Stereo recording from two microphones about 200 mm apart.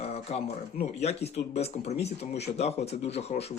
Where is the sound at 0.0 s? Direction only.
30° left (ahead or behind).